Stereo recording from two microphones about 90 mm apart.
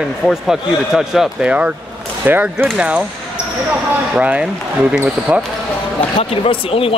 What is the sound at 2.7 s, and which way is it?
Speech, 10° right (ahead or behind).